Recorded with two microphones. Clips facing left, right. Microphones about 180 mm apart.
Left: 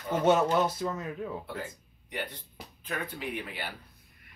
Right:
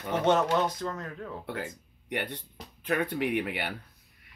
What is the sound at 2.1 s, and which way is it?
Speech, 65° right (ahead or behind).